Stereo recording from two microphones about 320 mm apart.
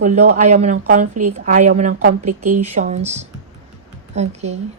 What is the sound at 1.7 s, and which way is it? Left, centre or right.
Speech, right.